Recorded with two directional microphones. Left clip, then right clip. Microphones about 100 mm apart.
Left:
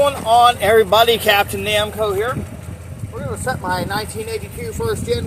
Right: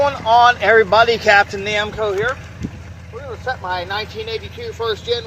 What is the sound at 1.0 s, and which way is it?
Speech, 15° left (ahead or behind).